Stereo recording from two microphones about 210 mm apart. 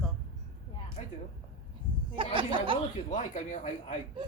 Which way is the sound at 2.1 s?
25° right (ahead or behind).